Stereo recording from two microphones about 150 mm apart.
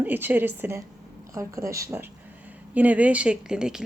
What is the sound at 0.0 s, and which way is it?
Speech, 15° right (ahead or behind).